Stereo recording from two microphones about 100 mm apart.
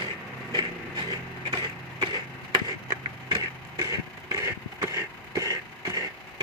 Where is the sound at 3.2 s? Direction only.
40° right (ahead or behind).